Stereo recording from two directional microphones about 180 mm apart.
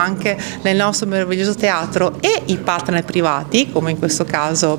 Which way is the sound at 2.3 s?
15° right (ahead or behind).